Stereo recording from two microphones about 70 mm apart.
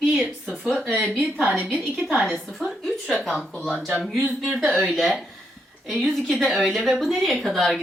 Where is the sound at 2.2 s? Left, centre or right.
Centre.